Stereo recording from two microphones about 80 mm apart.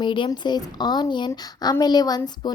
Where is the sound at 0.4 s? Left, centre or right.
Left.